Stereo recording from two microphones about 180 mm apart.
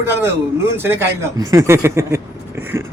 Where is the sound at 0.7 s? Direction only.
10° right (ahead or behind).